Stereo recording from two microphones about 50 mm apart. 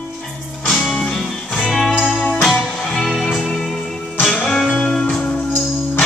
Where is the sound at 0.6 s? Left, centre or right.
Centre.